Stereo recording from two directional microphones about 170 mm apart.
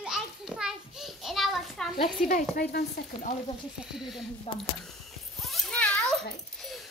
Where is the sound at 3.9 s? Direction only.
Centre (ahead or behind).